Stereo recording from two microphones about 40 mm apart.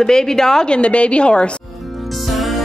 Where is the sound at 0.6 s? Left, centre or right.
Left.